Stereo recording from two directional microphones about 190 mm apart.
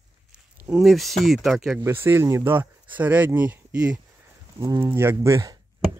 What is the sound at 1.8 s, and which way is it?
Speech, 10° right (ahead or behind).